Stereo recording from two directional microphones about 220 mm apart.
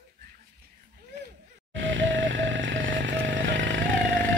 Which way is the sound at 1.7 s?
60° right (ahead or behind).